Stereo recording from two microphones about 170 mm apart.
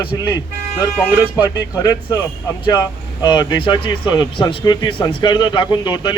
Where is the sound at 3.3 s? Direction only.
25° left (ahead or behind).